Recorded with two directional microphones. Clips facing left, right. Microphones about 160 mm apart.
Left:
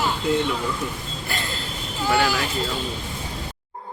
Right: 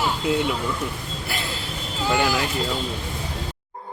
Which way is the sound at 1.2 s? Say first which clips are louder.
Even; 5° right (ahead or behind).